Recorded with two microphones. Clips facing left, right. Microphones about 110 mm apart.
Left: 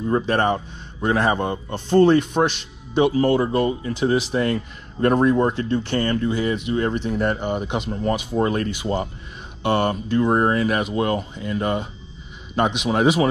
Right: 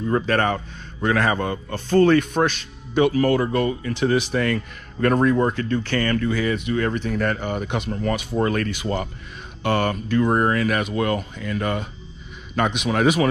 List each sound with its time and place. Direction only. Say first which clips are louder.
0.1 s speech: left 1 dB; 20° left (ahead or behind)